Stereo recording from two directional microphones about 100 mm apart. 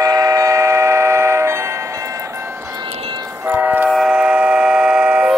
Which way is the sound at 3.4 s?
20° right (ahead or behind).